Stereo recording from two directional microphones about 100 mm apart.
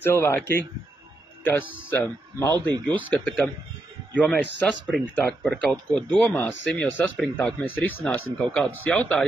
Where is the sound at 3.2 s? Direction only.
15° left (ahead or behind).